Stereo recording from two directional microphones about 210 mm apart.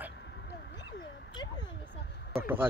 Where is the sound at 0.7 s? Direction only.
50° left (ahead or behind).